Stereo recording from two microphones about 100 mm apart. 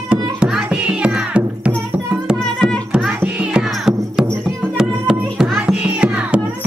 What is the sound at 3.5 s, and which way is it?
Music, 10° right (ahead or behind).